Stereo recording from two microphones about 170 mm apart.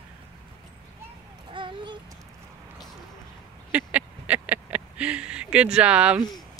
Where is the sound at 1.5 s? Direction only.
30° right (ahead or behind).